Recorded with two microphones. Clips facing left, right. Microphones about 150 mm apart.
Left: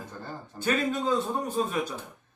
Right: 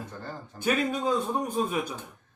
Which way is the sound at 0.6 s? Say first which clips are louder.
Even; 10° right (ahead or behind).